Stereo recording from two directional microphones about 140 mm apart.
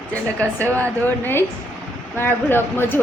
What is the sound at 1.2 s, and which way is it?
Speech, 15° left (ahead or behind).